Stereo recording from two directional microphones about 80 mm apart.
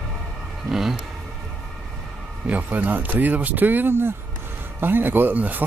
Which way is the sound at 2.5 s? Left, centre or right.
Centre.